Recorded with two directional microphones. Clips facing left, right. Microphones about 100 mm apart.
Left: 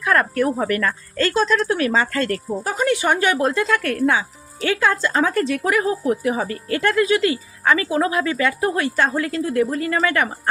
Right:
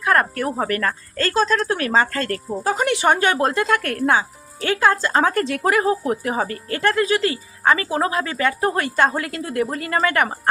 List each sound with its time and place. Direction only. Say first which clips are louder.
0.0 s speech: left 1 dB; 30° right (ahead or behind)